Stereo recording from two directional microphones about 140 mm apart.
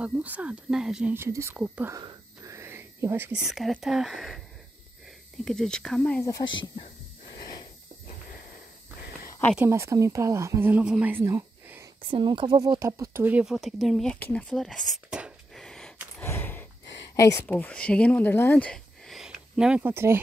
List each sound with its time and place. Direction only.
0.0 s speech: 10° right (ahead or behind)
1.1 s speech: 20° right (ahead or behind)
2.0 s whispering: 25° right (ahead or behind)
3.3 s speech: centre (ahead or behind)
5.4 s speech: 5° left (ahead or behind)
6.4 s speech: 35° left (ahead or behind)
9.7 s speech: 20° right (ahead or behind)
12.0 s speech: 35° right (ahead or behind); by 15.6 s 5° right (ahead or behind)
15.6 s a sound: 5° left (ahead or behind)
16.2 s a sound: 15° left (ahead or behind)
17.1 s speech: 20° left (ahead or behind)
17.6 s speech: 10° left (ahead or behind)
19.8 s speech: 15° right (ahead or behind)